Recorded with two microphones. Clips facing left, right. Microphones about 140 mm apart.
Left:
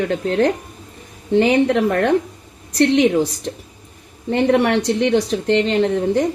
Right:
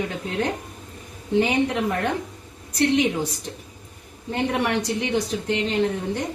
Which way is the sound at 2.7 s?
90° left.